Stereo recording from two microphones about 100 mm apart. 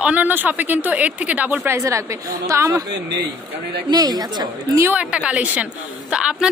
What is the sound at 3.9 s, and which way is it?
Speech, 40° right (ahead or behind).